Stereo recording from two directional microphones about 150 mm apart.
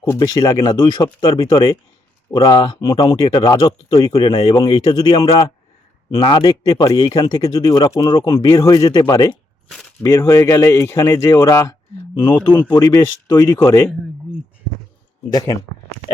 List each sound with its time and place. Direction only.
0.0 s speech: 25° left (ahead or behind)
15.3 s speech: 25° left (ahead or behind)